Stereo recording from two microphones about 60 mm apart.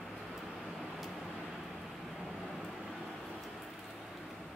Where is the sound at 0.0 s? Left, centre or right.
Centre.